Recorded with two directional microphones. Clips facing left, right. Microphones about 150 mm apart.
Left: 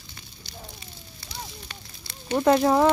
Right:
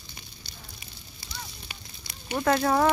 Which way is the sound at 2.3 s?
20° left (ahead or behind).